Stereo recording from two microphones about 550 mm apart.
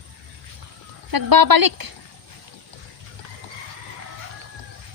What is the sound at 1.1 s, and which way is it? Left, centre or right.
Speech, right.